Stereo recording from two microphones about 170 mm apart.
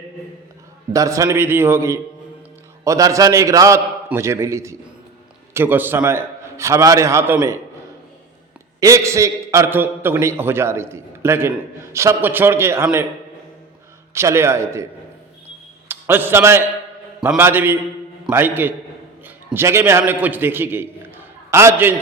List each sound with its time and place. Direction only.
0.9 s a man's voice: 20° right (ahead or behind)
8.8 s a man's voice: 20° right (ahead or behind)
14.1 s a man's voice: 15° right (ahead or behind)
15.9 s a man's voice: 10° right (ahead or behind)